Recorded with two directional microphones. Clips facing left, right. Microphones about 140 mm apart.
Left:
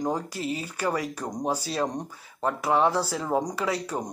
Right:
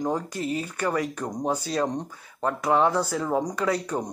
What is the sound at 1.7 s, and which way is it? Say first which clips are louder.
Speech: right 2 dB; 10° left (ahead or behind).